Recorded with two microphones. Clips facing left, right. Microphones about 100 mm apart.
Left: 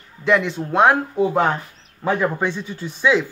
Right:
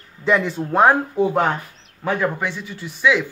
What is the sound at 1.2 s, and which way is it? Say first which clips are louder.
Speech: even; 5° left (ahead or behind).